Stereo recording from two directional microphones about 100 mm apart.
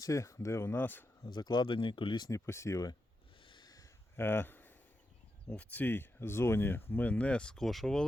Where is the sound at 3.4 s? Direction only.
50° left (ahead or behind).